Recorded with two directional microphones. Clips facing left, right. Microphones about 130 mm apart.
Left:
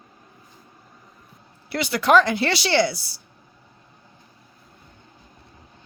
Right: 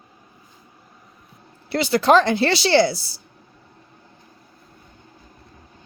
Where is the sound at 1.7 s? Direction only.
30° right (ahead or behind).